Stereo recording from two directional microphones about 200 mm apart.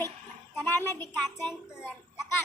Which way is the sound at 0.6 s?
10° left (ahead or behind).